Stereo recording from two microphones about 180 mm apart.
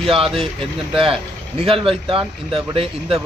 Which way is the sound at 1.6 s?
30° right (ahead or behind).